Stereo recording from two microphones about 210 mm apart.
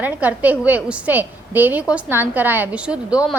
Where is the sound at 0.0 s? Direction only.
10° right (ahead or behind).